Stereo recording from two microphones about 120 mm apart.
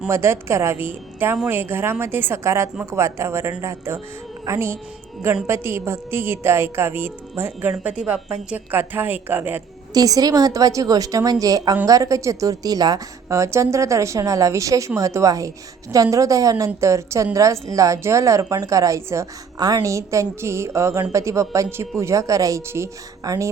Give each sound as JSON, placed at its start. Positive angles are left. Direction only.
{"t": 0.1, "sound": "a woman's voice", "side_deg": -20}
{"t": 9.9, "sound": "a woman's voice", "side_deg": -30}